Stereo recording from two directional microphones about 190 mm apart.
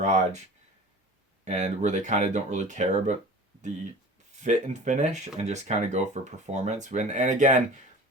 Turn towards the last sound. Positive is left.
turn(degrees=-40)  # may be behind; listen again after turning